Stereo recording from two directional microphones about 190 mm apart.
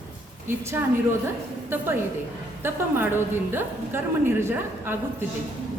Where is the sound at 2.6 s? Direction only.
10° right (ahead or behind).